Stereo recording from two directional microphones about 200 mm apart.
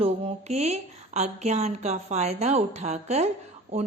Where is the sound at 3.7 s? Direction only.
50° right (ahead or behind).